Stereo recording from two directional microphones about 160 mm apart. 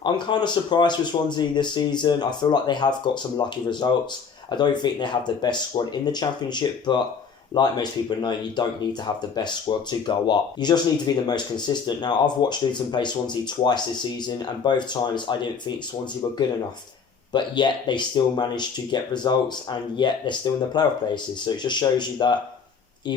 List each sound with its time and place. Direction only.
0.0 s speech: 30° left (ahead or behind)
17.3 s speech: 30° left (ahead or behind)